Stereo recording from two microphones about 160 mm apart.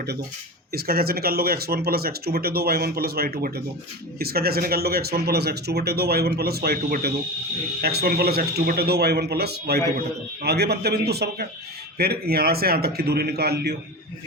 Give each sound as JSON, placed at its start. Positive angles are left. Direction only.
{"t": 0.7, "sound": "speech", "side_deg": -70}
{"t": 11.9, "sound": "speech", "side_deg": -75}